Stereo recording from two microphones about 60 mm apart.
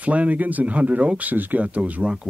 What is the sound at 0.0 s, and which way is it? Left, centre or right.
Speech, right.